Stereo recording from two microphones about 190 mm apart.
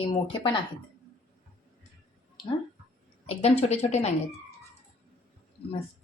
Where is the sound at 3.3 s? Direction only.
30° left (ahead or behind).